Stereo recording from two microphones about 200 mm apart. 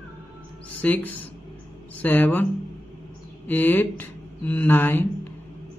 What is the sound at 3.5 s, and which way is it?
A man's voice, 10° left (ahead or behind).